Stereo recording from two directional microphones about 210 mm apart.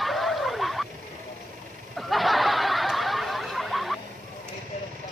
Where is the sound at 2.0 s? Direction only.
Centre (ahead or behind).